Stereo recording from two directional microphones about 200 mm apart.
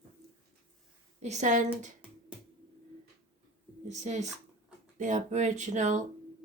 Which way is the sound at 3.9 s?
35° right (ahead or behind).